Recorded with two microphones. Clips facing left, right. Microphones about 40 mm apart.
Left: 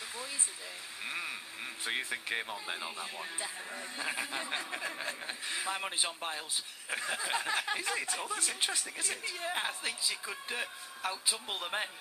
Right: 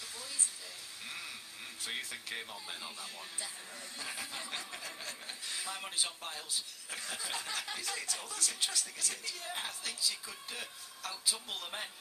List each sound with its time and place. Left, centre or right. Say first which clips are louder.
1.0 s speech: left 7 dB; left